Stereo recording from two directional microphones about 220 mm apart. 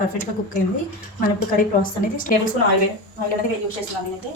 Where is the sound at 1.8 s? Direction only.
35° left (ahead or behind).